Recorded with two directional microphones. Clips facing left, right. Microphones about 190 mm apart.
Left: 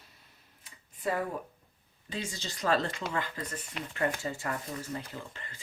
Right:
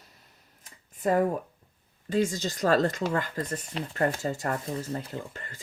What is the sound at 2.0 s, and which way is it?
Speech, 45° right (ahead or behind).